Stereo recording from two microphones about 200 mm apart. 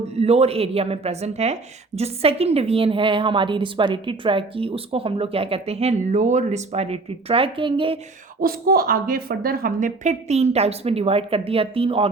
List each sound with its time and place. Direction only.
0.2 s a woman's voice: 30° right (ahead or behind)
8.4 s a woman's voice: 50° right (ahead or behind); by 12.1 s 30° right (ahead or behind)